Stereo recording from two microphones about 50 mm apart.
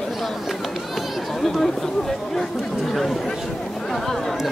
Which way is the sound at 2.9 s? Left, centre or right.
Centre.